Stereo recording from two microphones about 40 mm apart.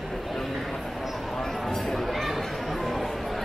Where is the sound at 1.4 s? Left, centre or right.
Centre.